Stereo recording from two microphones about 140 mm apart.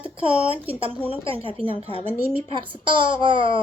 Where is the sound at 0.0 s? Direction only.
40° right (ahead or behind).